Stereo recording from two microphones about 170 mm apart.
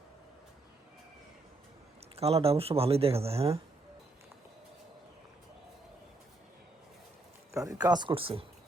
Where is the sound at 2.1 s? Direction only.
35° right (ahead or behind).